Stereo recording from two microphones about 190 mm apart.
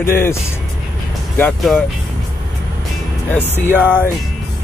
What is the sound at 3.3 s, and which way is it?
Speech, 10° left (ahead or behind).